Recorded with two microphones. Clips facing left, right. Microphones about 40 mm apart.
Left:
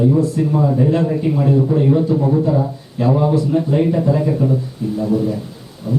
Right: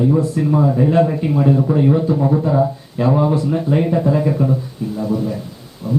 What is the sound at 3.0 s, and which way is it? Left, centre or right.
A man's voice, centre.